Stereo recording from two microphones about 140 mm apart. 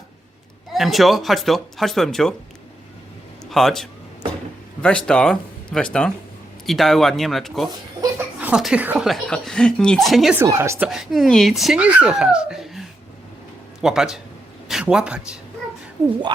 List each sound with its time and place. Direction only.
0.7 s speech: centre (ahead or behind)
3.4 s a man's voice: 5° left (ahead or behind)
8.4 s chuckle: 10° right (ahead or behind)
8.6 s speech: 10° right (ahead or behind)
9.0 s speech: 5° left (ahead or behind)
10.3 s speech: 20° right (ahead or behind)
10.8 s speech: 5° right (ahead or behind)
13.8 s speech: 5° right (ahead or behind)